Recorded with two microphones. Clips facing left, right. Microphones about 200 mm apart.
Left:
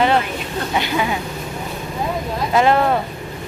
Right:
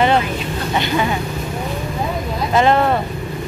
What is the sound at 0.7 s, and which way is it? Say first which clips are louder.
Speech: right 2 dB; 5° left (ahead or behind).